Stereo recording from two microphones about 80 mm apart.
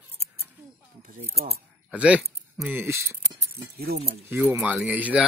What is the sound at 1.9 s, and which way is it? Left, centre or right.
Speech, centre.